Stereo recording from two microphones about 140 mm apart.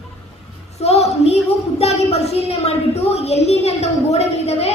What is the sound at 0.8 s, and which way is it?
A woman's voice, 50° left (ahead or behind).